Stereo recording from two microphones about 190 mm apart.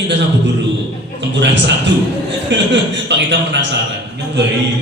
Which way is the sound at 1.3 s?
70° right (ahead or behind).